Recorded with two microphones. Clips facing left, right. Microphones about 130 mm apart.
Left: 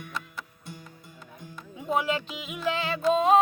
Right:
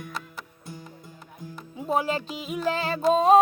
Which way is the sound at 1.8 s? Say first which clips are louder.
Right 1 dB; 35° right (ahead or behind).